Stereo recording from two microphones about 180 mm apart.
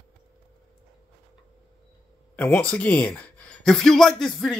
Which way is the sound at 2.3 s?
10° left (ahead or behind).